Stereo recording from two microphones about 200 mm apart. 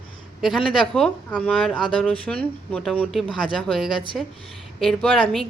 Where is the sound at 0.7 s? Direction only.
Centre (ahead or behind).